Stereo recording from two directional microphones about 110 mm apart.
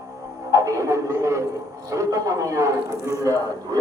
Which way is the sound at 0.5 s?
30° right (ahead or behind).